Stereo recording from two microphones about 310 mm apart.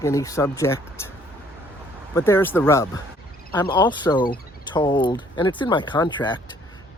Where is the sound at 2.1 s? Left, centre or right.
Centre.